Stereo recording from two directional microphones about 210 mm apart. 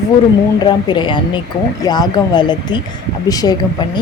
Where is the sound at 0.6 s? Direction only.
20° left (ahead or behind).